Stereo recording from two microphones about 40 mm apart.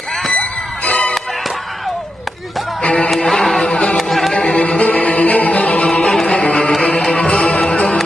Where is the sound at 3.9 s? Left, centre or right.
Centre.